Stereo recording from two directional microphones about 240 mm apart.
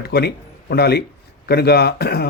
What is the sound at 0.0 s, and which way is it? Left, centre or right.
A man's voice, left.